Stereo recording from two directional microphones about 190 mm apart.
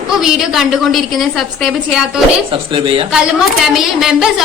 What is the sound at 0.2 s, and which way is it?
Church bell, centre (ahead or behind).